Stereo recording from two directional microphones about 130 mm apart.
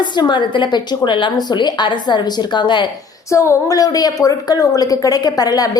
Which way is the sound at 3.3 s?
25° left (ahead or behind).